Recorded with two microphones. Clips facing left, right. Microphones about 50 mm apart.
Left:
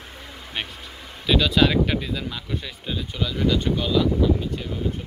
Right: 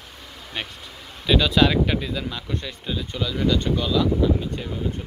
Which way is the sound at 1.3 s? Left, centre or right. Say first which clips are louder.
Right 1 dB; centre.